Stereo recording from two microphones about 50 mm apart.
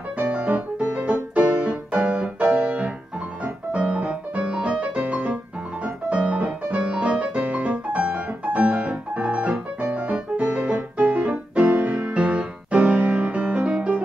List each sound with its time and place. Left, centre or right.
0.5 s music: right